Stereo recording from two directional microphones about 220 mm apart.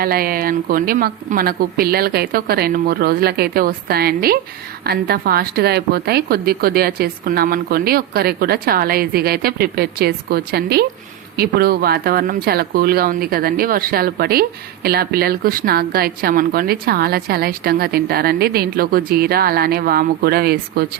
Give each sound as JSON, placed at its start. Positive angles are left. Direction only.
{"t": 0.0, "sound": "a woman's voice", "side_deg": -40}